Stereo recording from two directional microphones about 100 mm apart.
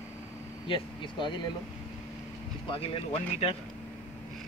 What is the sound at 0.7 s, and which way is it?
Speech, 55° left (ahead or behind).